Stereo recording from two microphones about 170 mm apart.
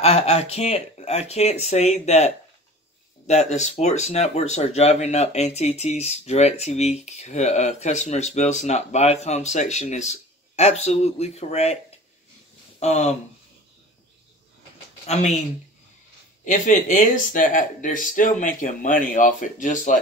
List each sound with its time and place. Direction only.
0.0 s speech: 40° left (ahead or behind)
16.4 s speech: 50° left (ahead or behind)